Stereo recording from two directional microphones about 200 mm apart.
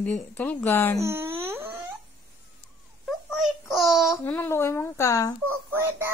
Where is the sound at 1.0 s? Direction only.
10° right (ahead or behind).